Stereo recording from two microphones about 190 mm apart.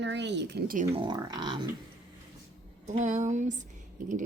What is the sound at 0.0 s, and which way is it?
Speech, 65° right (ahead or behind).